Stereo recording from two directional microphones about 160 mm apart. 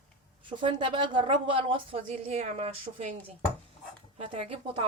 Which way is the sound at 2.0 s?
45° right (ahead or behind).